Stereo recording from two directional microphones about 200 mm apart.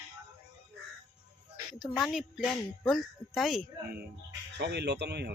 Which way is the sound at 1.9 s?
Centre (ahead or behind).